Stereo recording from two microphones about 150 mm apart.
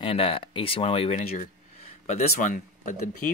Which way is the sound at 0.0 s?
35° left (ahead or behind).